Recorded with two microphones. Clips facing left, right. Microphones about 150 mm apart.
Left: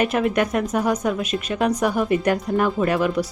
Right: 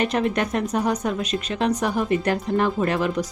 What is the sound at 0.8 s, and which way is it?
Speech, 5° left (ahead or behind).